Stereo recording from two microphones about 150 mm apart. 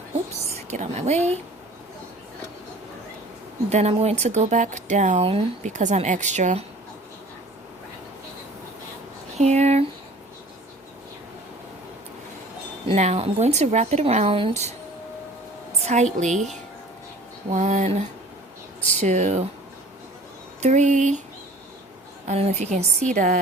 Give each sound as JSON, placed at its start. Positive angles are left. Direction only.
{"t": 0.7, "sound": "speech", "side_deg": -50}
{"t": 3.7, "sound": "speech", "side_deg": -45}
{"t": 9.3, "sound": "speech", "side_deg": -50}
{"t": 12.9, "sound": "speech", "side_deg": -45}
{"t": 15.8, "sound": "speech", "side_deg": -50}
{"t": 17.5, "sound": "speech", "side_deg": -55}
{"t": 20.6, "sound": "speech", "side_deg": -55}
{"t": 22.3, "sound": "speech", "side_deg": -50}